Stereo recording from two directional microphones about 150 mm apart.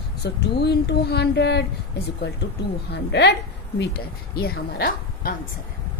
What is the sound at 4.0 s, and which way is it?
A woman's voice, 90° left.